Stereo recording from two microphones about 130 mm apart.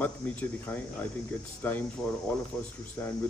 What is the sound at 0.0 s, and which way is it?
A man's voice, 10° left (ahead or behind).